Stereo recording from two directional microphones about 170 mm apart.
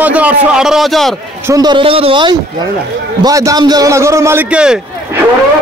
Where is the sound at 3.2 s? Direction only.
20° right (ahead or behind).